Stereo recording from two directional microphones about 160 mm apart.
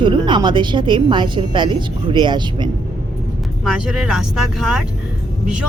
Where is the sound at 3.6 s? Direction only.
5° right (ahead or behind).